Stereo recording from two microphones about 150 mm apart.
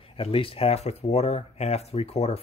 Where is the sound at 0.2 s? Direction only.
35° left (ahead or behind).